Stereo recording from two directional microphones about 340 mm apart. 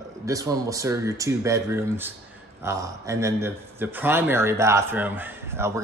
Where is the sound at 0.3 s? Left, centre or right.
Centre.